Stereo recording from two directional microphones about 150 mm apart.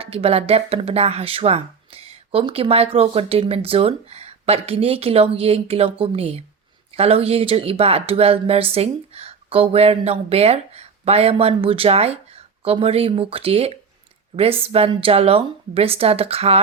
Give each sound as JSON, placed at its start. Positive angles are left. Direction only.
{"t": 0.0, "sound": "speech", "side_deg": -40}